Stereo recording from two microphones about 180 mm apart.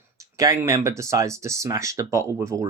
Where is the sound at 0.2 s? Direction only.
15° right (ahead or behind).